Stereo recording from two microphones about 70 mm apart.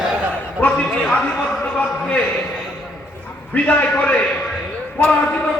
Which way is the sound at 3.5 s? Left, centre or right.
Left.